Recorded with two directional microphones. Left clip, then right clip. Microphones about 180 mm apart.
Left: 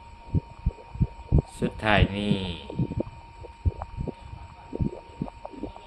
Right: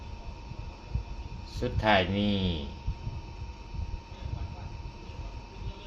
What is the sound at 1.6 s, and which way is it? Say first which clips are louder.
Speech: left 1 dB; 35° left (ahead or behind).